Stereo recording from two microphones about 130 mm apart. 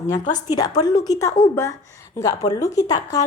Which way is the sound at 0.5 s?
30° left (ahead or behind).